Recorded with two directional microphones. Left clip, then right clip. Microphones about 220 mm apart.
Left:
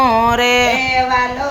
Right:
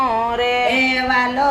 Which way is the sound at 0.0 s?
50° left (ahead or behind).